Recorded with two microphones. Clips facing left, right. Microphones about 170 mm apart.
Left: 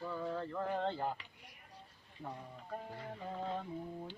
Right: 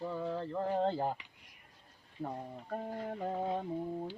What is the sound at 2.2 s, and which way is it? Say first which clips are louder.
Speech: right 6 dB; 45° right (ahead or behind).